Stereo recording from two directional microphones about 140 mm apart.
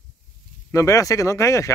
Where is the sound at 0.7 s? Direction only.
25° left (ahead or behind).